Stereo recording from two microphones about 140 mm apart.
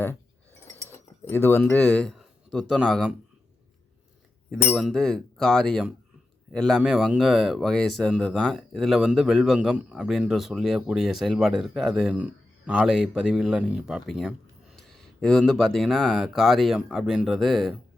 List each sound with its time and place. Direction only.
0.6 s mechanisms: 15° left (ahead or behind)
1.3 s speech: 15° left (ahead or behind); by 3.2 s centre (ahead or behind)
4.5 s speech: centre (ahead or behind)